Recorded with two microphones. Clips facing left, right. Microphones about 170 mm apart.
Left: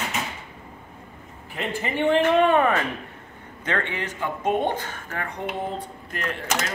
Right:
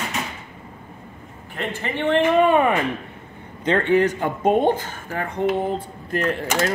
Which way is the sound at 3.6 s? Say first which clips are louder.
Right 10 dB; 35° right (ahead or behind).